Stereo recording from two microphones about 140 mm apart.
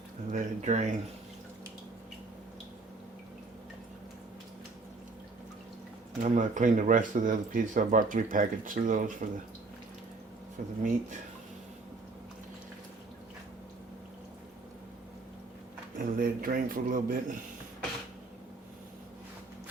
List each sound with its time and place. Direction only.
0.3 s speech: 60° right (ahead or behind)
6.2 s speech: 60° right (ahead or behind)
10.6 s speech: 75° right (ahead or behind)
16.0 s a man's voice: 90° right